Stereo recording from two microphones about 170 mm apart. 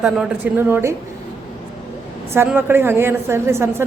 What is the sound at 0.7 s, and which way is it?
Speech, 15° right (ahead or behind).